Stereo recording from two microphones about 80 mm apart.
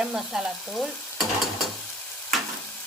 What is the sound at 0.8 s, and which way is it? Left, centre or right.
Stir, centre.